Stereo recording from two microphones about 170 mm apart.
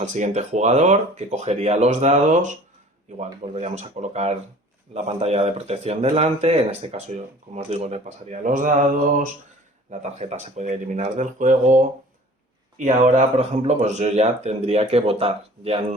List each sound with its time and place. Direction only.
0.0 s speech: 45° right (ahead or behind)